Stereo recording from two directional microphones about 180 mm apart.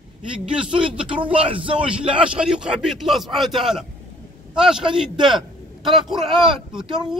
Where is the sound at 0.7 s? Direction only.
30° right (ahead or behind).